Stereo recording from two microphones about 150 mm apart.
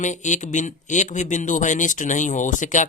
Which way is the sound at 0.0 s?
55° left (ahead or behind).